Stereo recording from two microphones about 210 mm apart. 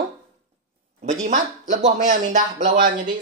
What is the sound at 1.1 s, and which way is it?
Speech, 35° right (ahead or behind).